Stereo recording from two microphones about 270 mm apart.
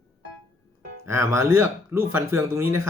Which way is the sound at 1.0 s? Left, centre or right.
Centre.